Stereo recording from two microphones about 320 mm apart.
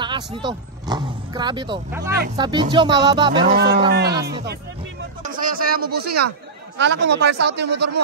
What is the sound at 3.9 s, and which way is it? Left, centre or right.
Speech, right.